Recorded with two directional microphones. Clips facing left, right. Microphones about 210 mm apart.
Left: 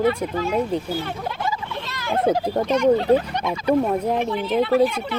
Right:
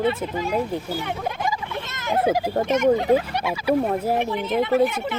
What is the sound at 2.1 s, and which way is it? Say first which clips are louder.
Speech: left 1 dB; 5° right (ahead or behind).